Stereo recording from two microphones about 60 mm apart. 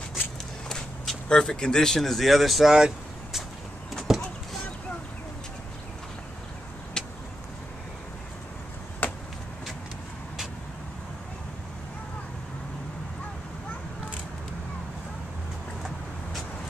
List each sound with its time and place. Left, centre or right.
0.7 s speech: centre
4.1 s clip-clop: centre
9.0 s a sound: left